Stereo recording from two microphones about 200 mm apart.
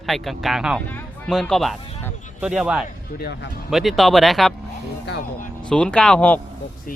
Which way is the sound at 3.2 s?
50° left (ahead or behind).